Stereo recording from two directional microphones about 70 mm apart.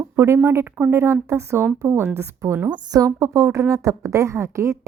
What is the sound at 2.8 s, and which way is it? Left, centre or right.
A woman's voice, right.